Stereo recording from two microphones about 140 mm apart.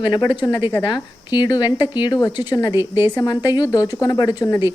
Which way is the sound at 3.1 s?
30° left (ahead or behind).